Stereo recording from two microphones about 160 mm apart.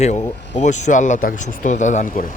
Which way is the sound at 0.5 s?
50° left (ahead or behind).